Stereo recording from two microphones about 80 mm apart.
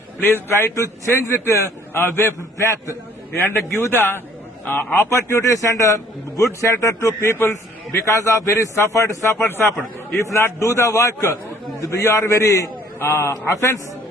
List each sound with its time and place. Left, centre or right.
0.2 s a man's voice: left
0.5 s a man's voice: left
3.3 s a man's voice: left
5.0 s a man's voice: left
9.7 s a man's voice: centre
10.2 s a man's voice: left